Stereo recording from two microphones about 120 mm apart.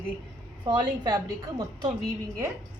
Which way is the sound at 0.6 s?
40° right (ahead or behind).